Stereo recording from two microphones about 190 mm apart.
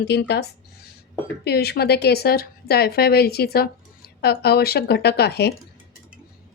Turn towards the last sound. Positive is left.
turn(degrees=55)  # may be behind; listen again after turning